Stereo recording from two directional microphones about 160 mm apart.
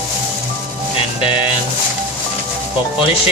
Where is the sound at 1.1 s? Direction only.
35° left (ahead or behind).